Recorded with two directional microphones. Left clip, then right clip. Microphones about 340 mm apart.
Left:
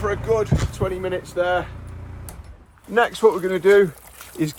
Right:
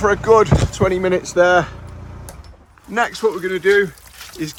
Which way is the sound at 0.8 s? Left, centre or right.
Right.